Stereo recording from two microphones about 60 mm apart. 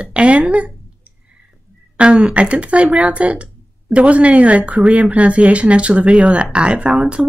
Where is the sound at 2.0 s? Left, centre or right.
Centre.